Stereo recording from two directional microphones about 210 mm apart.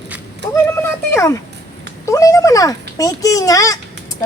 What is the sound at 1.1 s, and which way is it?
A woman's voice, 15° left (ahead or behind).